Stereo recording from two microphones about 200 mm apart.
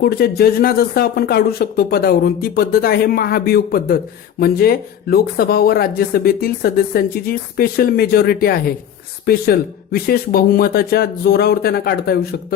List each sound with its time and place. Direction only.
0.0 s speech: 50° left (ahead or behind)